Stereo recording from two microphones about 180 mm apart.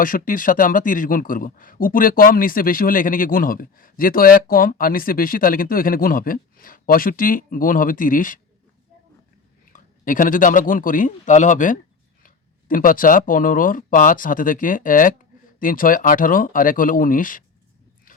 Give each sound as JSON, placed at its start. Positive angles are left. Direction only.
{"t": 0.0, "sound": "speech", "side_deg": 50}
{"t": 9.7, "sound": "speech", "side_deg": 45}